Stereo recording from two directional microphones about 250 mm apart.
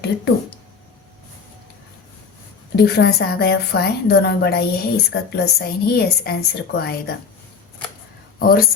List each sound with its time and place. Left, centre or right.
2.7 s a woman's voice: left
8.4 s speech: left